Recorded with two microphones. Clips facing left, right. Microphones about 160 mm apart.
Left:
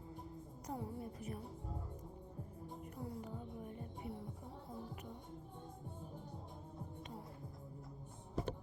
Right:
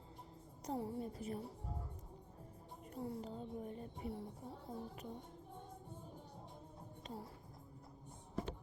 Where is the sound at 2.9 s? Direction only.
30° right (ahead or behind).